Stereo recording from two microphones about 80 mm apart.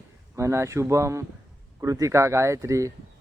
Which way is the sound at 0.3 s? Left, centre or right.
Right.